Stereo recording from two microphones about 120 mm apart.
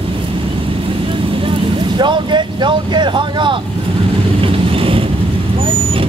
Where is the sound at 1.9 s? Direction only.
40° right (ahead or behind).